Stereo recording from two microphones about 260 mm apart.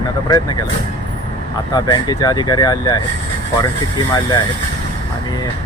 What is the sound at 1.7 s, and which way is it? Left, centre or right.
Speech, centre.